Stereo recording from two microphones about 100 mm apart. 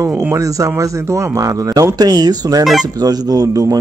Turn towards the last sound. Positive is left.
turn(degrees=-35)  # may be behind; listen again after turning